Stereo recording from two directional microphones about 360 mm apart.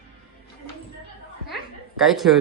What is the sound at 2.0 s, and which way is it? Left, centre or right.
Speech, centre.